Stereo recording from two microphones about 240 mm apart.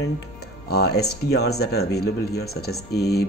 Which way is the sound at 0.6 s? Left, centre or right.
Left.